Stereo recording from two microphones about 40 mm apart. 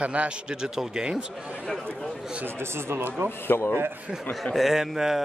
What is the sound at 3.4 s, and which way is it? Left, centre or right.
Speech, left.